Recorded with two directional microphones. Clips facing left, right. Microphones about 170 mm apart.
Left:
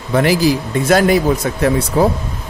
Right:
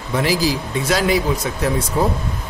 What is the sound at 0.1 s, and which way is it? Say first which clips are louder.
Speech: left 5 dB; 60° left (ahead or behind).